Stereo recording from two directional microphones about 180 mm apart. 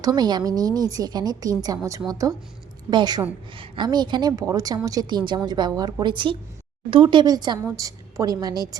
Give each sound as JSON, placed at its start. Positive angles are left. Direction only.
{"t": 0.0, "sound": "a woman's voice", "side_deg": -20}